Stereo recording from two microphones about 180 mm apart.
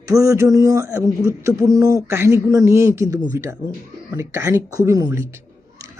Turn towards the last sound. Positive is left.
turn(degrees=-20)  # may be behind; listen again after turning